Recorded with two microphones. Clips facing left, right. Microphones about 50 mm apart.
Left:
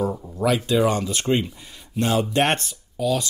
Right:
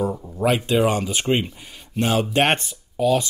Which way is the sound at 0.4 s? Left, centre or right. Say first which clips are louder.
Right 1 dB; right.